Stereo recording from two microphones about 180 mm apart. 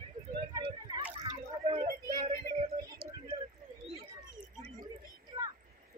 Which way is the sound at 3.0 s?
30° right (ahead or behind).